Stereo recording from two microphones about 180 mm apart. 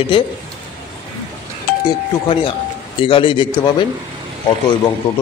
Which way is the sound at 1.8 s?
25° left (ahead or behind).